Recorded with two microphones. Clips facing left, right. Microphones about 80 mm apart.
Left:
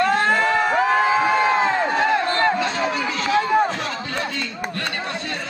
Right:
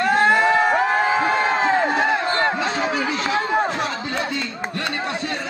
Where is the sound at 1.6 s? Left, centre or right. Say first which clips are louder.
Right 1 dB; centre.